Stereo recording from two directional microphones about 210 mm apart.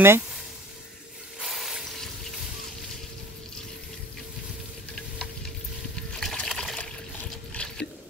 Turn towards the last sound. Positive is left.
turn(degrees=5)  # may be behind; listen again after turning